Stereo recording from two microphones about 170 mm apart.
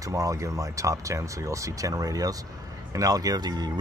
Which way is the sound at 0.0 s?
20° right (ahead or behind).